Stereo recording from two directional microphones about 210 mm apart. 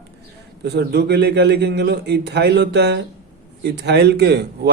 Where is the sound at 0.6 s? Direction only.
55° right (ahead or behind).